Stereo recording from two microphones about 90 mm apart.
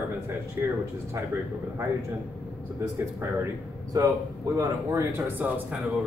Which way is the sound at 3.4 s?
35° right (ahead or behind).